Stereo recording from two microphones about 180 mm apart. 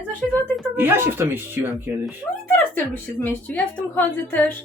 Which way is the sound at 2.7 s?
10° left (ahead or behind).